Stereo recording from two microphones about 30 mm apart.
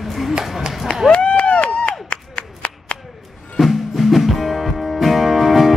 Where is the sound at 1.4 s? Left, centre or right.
Left.